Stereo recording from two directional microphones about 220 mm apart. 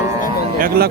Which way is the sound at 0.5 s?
40° right (ahead or behind).